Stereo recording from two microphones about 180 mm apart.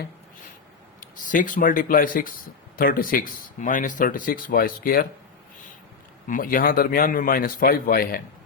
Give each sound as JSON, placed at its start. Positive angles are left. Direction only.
{"t": 1.2, "sound": "speech", "side_deg": 45}
{"t": 6.2, "sound": "speech", "side_deg": 50}